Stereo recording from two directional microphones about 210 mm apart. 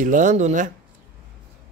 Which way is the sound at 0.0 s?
35° right (ahead or behind).